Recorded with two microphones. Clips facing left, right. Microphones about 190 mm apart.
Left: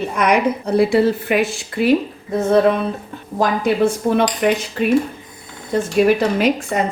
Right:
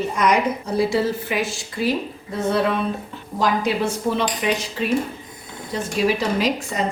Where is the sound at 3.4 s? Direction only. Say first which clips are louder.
Left 5 dB; 55° left (ahead or behind).